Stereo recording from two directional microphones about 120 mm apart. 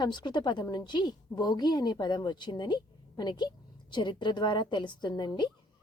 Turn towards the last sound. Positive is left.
turn(degrees=35)  # may be behind; listen again after turning